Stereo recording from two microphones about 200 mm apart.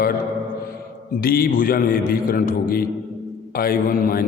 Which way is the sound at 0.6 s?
45° left (ahead or behind).